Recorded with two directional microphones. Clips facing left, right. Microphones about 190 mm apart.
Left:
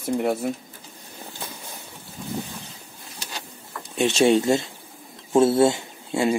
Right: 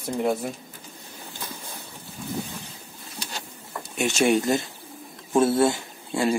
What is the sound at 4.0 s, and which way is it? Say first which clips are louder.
Speech: left 3 dB; 30° left (ahead or behind).